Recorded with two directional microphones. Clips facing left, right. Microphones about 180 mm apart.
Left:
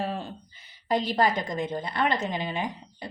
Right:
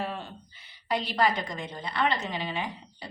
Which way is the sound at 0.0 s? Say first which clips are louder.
Left 3 dB; 35° left (ahead or behind).